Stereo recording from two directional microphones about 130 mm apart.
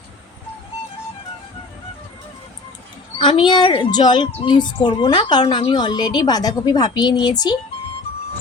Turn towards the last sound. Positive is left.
turn(degrees=30)  # may be behind; listen again after turning